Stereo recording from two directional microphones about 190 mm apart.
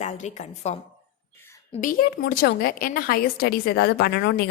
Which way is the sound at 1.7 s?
45° left (ahead or behind).